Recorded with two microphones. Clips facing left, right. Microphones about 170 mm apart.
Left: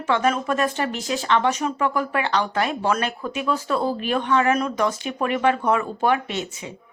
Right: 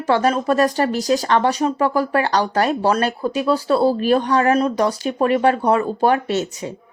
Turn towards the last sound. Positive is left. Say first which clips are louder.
# right 7 dB
turn(degrees=-40)  # may be behind; listen again after turning